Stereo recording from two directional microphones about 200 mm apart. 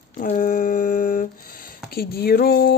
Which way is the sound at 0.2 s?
40° left (ahead or behind).